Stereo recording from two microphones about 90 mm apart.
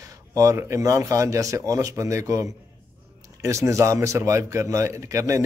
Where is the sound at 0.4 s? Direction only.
35° right (ahead or behind).